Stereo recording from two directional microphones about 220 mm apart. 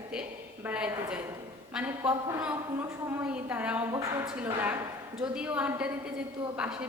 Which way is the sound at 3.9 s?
15° right (ahead or behind).